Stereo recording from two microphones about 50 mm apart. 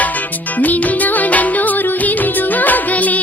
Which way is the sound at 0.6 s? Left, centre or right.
Left.